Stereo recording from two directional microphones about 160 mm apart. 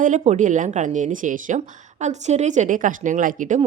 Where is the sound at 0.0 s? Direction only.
50° right (ahead or behind).